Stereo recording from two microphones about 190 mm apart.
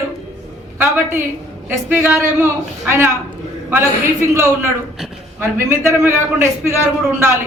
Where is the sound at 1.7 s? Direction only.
10° right (ahead or behind).